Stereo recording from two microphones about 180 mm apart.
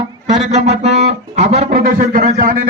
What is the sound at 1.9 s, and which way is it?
Speech, 50° right (ahead or behind).